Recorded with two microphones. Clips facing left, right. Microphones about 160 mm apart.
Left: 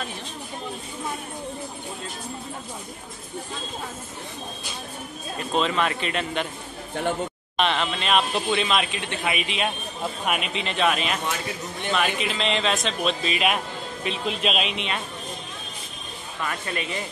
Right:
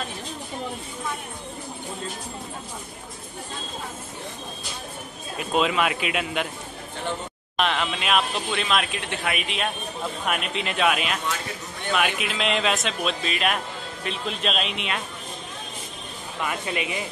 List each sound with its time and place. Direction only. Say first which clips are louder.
5.4 s speech: right 1 dB; 5° right (ahead or behind)
7.5 s speech: even; centre (ahead or behind)
16.3 s speech: right 2 dB; 15° right (ahead or behind)